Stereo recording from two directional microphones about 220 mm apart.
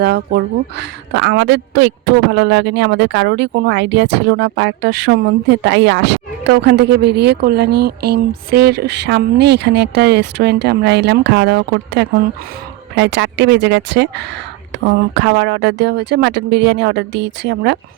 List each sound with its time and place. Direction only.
0.0 s a woman's voice: 45° right (ahead or behind)